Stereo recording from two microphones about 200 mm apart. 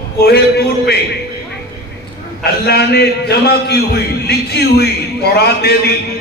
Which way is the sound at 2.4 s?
55° left (ahead or behind).